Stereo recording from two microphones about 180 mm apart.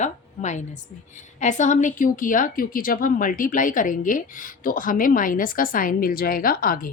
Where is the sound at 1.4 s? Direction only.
40° left (ahead or behind).